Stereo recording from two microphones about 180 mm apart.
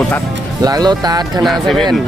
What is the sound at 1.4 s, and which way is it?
Speech, centre (ahead or behind).